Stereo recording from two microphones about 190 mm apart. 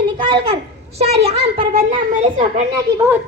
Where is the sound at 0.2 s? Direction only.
25° right (ahead or behind).